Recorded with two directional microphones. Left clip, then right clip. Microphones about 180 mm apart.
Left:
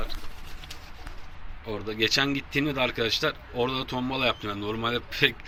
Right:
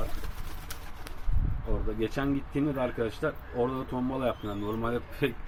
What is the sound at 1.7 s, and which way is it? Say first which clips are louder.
A man's voice: left 7 dB; 10° left (ahead or behind).